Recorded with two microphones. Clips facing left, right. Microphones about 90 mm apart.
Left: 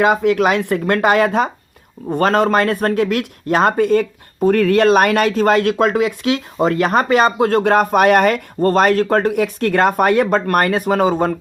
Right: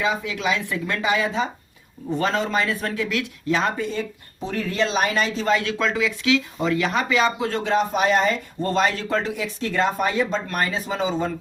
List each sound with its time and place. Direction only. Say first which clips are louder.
0.0 s speech: left 10 dB; 60° left (ahead or behind)